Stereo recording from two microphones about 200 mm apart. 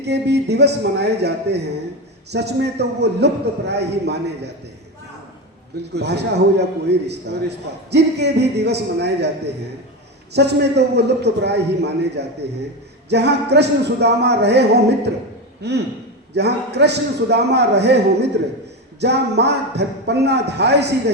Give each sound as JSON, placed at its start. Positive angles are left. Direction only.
{"t": 0.0, "sound": "a man's voice", "side_deg": -55}
{"t": 5.9, "sound": "a man's voice", "side_deg": -55}
{"t": 10.3, "sound": "a man's voice", "side_deg": -55}